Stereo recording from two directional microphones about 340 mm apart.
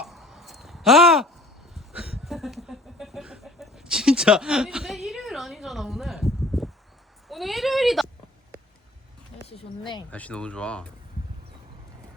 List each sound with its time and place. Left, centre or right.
0.0 s a sound: centre
7.3 s speech: centre
9.5 s speech: centre